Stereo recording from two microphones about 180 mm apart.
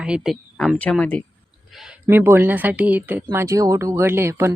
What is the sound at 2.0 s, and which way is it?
Speech, 15° right (ahead or behind).